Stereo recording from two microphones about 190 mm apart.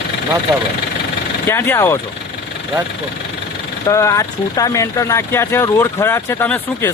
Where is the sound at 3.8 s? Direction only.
15° left (ahead or behind).